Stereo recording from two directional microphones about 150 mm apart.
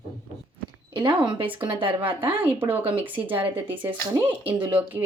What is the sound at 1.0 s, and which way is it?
Speech, 35° right (ahead or behind).